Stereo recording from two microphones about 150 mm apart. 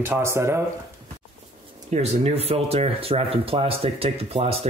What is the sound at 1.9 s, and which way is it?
Speech, 45° right (ahead or behind).